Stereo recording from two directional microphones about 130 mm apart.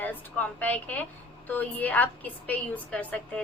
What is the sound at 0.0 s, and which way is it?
A woman's voice, 15° left (ahead or behind).